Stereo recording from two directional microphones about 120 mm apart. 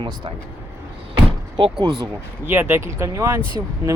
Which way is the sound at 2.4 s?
15° right (ahead or behind).